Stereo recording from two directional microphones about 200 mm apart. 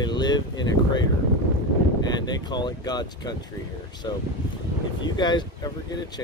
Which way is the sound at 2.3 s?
20° left (ahead or behind).